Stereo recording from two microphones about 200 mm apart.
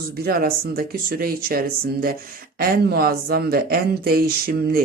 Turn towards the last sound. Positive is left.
turn(degrees=-45)  # may be behind; listen again after turning